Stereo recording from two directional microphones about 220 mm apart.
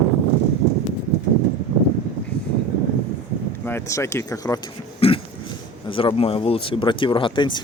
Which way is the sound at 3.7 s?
10° left (ahead or behind).